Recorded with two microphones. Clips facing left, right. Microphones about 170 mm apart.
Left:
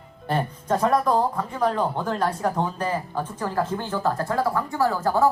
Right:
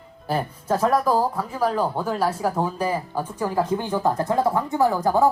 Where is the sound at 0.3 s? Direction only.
5° right (ahead or behind).